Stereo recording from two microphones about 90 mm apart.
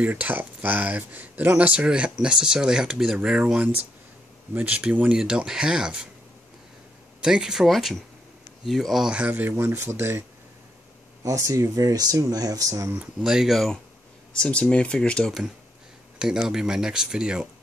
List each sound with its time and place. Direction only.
0.0 s speech: 20° right (ahead or behind)
7.2 s speech: 10° right (ahead or behind); by 10.2 s 25° right (ahead or behind)
11.2 s speech: 40° right (ahead or behind)
12.9 s speech: 10° right (ahead or behind)
14.3 s speech: 10° left (ahead or behind)
16.2 s speech: 5° right (ahead or behind)